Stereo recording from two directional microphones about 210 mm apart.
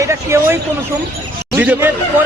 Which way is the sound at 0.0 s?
10° right (ahead or behind).